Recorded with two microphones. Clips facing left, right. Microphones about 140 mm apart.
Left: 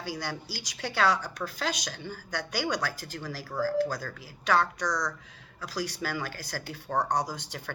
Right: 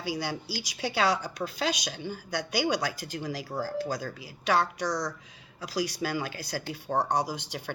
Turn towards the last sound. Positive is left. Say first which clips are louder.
# right 1 dB
turn(degrees=-10)  # may be behind; listen again after turning